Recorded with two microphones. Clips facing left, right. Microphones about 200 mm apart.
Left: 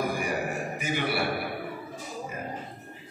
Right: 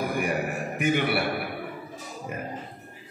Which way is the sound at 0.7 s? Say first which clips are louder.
Right 7 dB; 60° right (ahead or behind).